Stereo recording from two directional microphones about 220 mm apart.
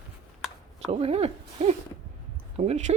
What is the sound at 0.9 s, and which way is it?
Speech, 25° right (ahead or behind).